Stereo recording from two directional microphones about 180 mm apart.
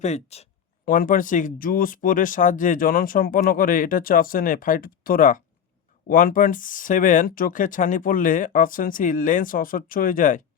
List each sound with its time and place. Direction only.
0.0 s speech: 40° left (ahead or behind)
0.9 s speech: 50° left (ahead or behind)